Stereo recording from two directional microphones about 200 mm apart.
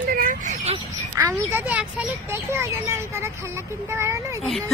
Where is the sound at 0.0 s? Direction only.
45° right (ahead or behind).